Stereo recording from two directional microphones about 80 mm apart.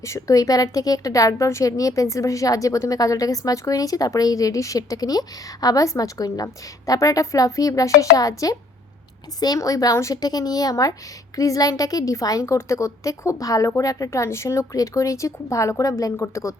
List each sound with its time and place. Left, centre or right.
0.0 s a woman's voice: left
9.6 s a woman's voice: left
10.2 s a woman's voice: left